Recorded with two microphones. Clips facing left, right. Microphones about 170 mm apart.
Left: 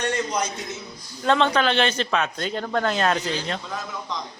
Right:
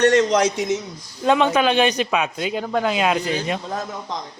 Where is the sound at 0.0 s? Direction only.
80° right.